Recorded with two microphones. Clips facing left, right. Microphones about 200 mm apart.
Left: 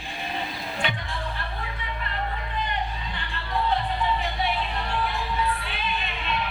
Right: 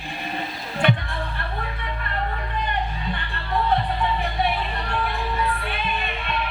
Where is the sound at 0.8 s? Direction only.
55° right (ahead or behind).